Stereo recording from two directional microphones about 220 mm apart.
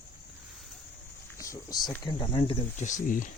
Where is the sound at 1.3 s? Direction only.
15° left (ahead or behind); by 3.2 s 35° left (ahead or behind).